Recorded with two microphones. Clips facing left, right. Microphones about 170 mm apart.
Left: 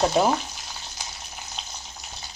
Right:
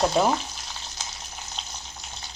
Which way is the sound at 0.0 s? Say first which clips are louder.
Left 1 dB; 5° left (ahead or behind).